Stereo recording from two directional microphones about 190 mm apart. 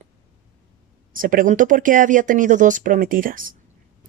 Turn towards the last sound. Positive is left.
turn(degrees=-45)  # may be behind; listen again after turning